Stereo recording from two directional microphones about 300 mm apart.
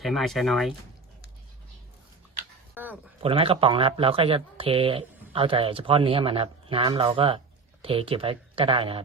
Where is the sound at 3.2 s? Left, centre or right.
Centre.